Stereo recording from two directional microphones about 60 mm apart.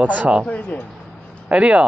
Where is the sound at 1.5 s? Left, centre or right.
Right.